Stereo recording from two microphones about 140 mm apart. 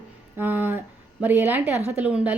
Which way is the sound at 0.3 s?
15° right (ahead or behind).